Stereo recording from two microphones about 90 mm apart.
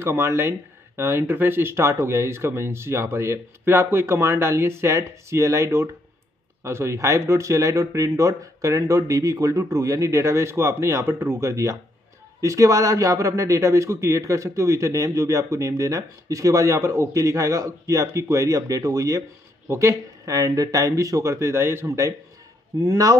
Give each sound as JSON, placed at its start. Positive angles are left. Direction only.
{"t": 0.0, "sound": "speech", "side_deg": -30}